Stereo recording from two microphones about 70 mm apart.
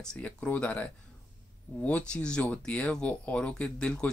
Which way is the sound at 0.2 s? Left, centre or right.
Centre.